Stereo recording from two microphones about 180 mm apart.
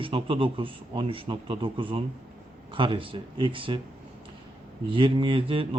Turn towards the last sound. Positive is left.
turn(degrees=-30)  # may be behind; listen again after turning